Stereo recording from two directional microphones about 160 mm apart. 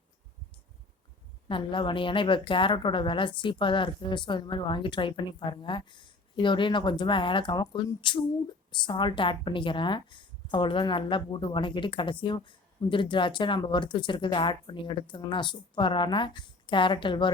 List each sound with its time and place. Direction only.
1.5 s speech: 30° left (ahead or behind)